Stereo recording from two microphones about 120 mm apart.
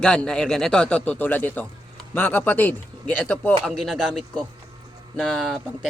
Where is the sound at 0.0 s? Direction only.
5° left (ahead or behind).